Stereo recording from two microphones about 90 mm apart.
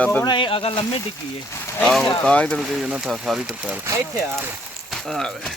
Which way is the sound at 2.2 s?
15° left (ahead or behind).